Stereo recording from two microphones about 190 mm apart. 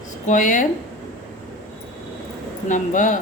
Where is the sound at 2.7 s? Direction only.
40° left (ahead or behind).